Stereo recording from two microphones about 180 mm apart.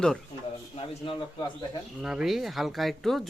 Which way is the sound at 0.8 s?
30° left (ahead or behind).